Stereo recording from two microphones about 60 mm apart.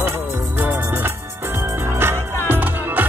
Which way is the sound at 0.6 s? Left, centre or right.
Right.